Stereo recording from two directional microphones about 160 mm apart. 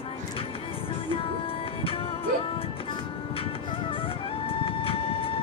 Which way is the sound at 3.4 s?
35° left (ahead or behind).